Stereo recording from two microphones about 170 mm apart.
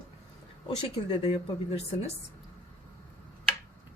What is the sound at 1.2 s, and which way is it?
Speech, 40° left (ahead or behind).